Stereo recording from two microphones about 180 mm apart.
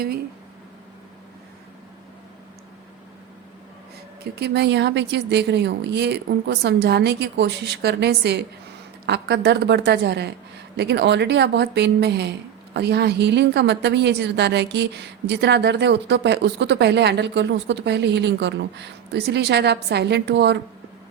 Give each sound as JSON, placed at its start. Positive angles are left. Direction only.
{"t": 4.2, "sound": "a woman's voice", "side_deg": -65}